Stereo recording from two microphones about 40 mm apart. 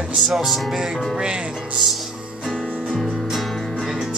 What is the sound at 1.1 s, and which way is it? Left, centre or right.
Speech, right.